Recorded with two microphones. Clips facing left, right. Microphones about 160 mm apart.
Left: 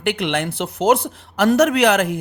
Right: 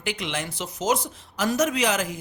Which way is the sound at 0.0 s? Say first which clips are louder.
Left 9 dB; 60° left (ahead or behind).